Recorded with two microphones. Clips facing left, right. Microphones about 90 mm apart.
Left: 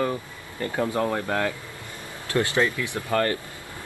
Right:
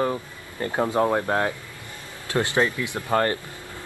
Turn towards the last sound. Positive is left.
turn(degrees=-20)  # may be behind; listen again after turning